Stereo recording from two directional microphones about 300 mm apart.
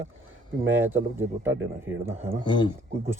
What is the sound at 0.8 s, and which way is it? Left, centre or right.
Speech, centre.